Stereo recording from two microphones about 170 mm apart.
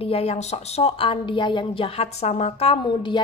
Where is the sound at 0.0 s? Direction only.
35° left (ahead or behind).